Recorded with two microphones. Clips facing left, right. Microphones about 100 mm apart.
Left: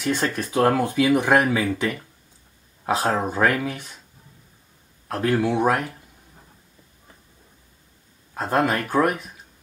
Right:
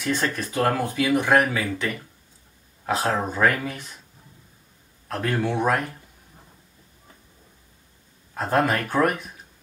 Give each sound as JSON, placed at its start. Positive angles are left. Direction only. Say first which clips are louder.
{"t": 0.0, "sound": "speech", "louder": "left 1 dB", "side_deg": 5}
{"t": 0.5, "sound": "speech", "louder": "left 5 dB", "side_deg": 15}
{"t": 5.2, "sound": "speech", "louder": "left 3 dB", "side_deg": 5}
{"t": 8.4, "sound": "speech", "louder": "even", "side_deg": 0}